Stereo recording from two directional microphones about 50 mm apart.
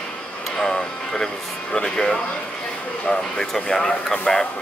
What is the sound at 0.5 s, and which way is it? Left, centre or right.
A child's voice, centre.